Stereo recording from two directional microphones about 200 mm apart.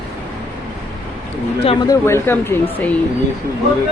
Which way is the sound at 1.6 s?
25° left (ahead or behind).